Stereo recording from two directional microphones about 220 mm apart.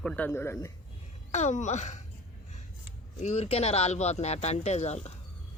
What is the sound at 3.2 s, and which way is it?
Speech, 30° left (ahead or behind).